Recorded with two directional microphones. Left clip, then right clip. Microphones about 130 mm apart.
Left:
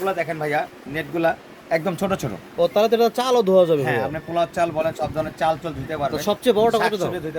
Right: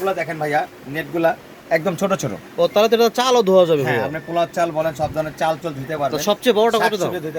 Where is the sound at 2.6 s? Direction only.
5° left (ahead or behind).